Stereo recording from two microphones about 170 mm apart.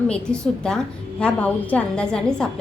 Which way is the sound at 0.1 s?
5° left (ahead or behind).